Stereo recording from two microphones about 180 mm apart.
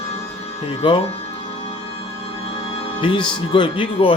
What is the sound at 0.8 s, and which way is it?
Speech, 30° left (ahead or behind).